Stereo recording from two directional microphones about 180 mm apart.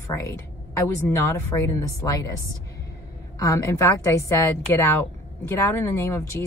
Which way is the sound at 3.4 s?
15° left (ahead or behind).